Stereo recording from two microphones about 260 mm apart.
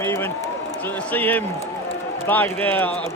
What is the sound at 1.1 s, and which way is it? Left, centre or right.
A man's voice, centre.